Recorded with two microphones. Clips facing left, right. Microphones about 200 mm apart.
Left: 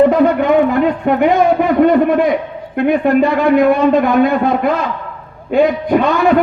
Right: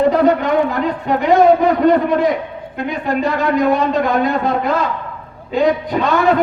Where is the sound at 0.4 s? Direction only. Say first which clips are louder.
Left 5 dB; 60° left (ahead or behind).